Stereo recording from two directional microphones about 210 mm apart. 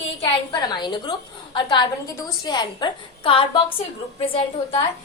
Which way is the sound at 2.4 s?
20° left (ahead or behind).